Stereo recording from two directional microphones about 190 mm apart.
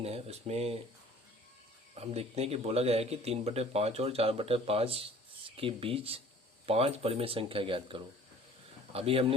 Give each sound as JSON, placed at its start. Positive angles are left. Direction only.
{"t": 0.0, "sound": "speech", "side_deg": -35}
{"t": 2.0, "sound": "speech", "side_deg": -30}